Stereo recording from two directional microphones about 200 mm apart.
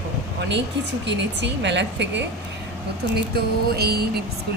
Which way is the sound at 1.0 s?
60° right (ahead or behind).